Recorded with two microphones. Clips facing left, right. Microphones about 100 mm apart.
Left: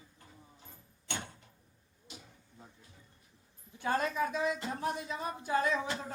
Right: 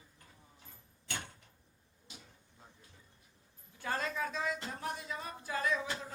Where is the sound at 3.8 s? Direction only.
20° left (ahead or behind).